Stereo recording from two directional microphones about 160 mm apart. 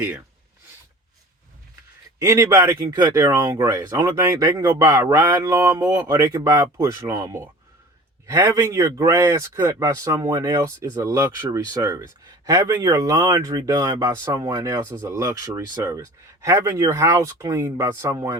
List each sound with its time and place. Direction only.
2.1 s a man's voice: 20° right (ahead or behind)